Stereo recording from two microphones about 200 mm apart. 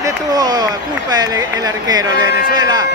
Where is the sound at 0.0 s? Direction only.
20° right (ahead or behind).